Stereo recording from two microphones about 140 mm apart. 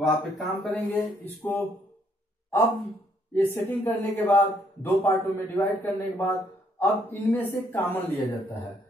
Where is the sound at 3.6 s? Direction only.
15° left (ahead or behind).